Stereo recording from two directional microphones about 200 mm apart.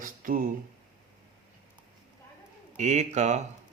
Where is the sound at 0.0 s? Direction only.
45° right (ahead or behind).